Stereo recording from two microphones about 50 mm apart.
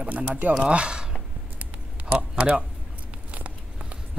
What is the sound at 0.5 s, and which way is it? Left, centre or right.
Speech, right.